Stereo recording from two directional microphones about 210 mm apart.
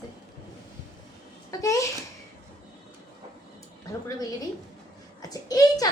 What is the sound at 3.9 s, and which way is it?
A woman's voice, 15° left (ahead or behind).